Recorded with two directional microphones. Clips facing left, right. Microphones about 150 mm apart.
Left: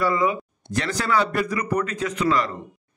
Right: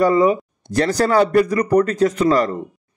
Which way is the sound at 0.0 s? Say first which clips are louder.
Right 7 dB; 40° right (ahead or behind).